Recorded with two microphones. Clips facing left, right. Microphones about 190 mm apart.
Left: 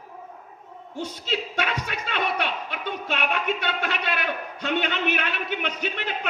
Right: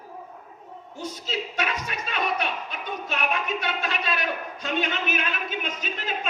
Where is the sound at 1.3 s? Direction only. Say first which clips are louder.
Left 1 dB; 60° left (ahead or behind).